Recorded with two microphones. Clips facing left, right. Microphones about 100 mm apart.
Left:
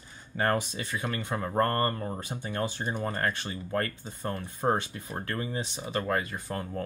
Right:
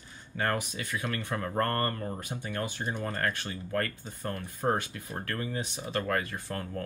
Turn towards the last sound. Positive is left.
turn(degrees=20)  # may be behind; listen again after turning